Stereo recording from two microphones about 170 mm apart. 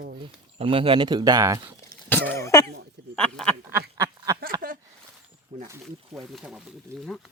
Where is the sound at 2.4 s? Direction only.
20° left (ahead or behind).